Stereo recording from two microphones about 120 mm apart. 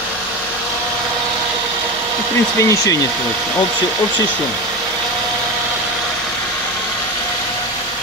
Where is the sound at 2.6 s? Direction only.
25° left (ahead or behind).